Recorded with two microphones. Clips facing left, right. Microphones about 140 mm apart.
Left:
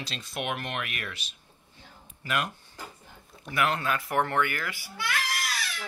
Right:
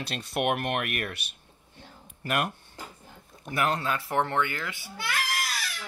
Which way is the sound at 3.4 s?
35° right (ahead or behind).